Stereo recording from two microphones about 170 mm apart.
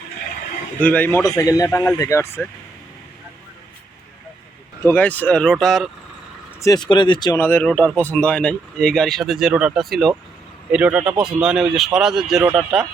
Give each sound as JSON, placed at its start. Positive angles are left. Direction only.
{"t": 0.8, "sound": "speech", "side_deg": 10}
{"t": 4.8, "sound": "speech", "side_deg": 10}
{"t": 6.6, "sound": "speech", "side_deg": 20}
{"t": 7.3, "sound": "speech", "side_deg": 10}